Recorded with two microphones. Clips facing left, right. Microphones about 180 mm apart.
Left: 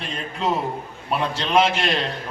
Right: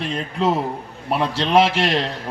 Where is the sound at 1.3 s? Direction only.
70° right (ahead or behind).